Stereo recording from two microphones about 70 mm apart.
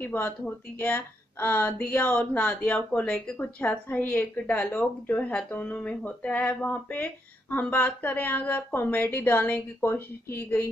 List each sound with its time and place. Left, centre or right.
0.0 s speech: left